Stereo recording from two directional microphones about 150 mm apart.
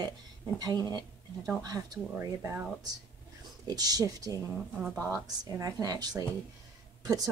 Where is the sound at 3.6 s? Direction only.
25° right (ahead or behind).